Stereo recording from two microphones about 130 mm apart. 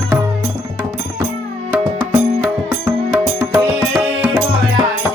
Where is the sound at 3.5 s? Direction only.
20° right (ahead or behind).